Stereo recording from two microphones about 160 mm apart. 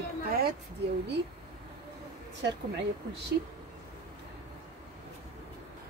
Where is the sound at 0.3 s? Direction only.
75° right (ahead or behind).